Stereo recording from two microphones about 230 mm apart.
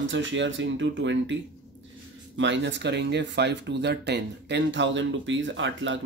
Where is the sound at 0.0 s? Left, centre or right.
Right.